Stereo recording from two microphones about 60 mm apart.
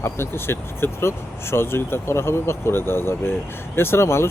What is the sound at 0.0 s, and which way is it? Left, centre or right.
Speech, left.